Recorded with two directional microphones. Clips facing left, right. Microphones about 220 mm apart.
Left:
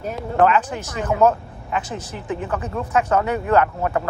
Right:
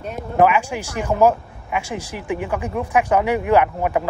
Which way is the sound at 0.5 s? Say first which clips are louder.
Even; 10° right (ahead or behind).